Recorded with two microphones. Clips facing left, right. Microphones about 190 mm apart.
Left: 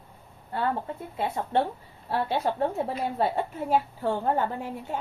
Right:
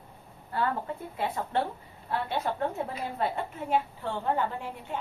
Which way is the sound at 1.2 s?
25° left (ahead or behind).